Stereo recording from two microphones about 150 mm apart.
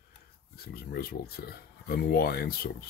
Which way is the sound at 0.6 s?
90° left.